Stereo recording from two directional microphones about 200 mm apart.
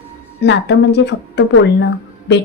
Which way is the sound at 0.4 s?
60° left (ahead or behind).